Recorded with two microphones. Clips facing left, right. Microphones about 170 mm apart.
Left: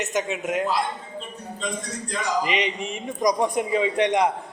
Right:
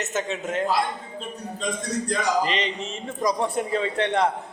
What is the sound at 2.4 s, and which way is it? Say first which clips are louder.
A man's voice: left 1 dB; 10° left (ahead or behind).